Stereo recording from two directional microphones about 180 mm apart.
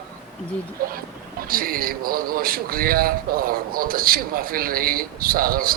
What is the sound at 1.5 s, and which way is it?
A man's voice, 55° right (ahead or behind).